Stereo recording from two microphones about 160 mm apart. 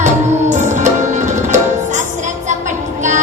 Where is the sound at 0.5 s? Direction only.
50° right (ahead or behind).